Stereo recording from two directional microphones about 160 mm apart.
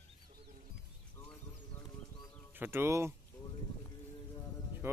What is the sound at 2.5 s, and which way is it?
Speech, 15° right (ahead or behind).